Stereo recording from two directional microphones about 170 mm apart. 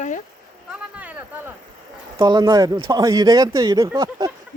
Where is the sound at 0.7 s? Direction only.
10° right (ahead or behind).